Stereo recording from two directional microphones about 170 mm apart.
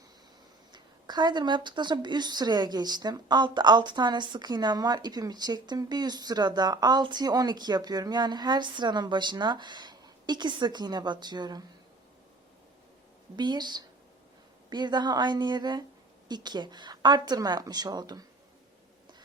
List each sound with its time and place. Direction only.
0.7 s a woman's voice: 25° right (ahead or behind)
13.3 s a woman's voice: 25° right (ahead or behind)